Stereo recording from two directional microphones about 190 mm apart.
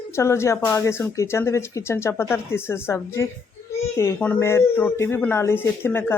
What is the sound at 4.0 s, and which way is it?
Speech, 10° left (ahead or behind).